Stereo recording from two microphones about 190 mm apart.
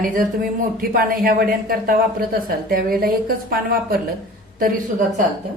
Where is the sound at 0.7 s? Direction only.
50° right (ahead or behind).